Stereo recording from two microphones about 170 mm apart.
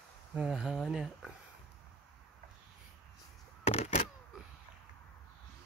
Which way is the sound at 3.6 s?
40° left (ahead or behind).